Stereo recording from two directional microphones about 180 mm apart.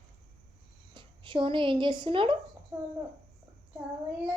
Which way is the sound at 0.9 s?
25° right (ahead or behind).